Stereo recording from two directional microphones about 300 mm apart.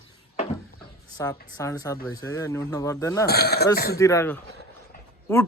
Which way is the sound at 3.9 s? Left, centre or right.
Centre.